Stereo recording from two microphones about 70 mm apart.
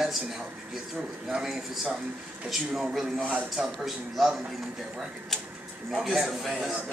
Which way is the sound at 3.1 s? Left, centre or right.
Right.